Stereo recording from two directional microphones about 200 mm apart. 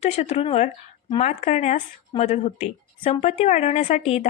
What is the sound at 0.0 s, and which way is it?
Speech, 35° left (ahead or behind).